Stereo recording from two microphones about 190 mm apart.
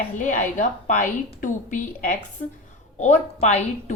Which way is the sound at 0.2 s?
40° left (ahead or behind).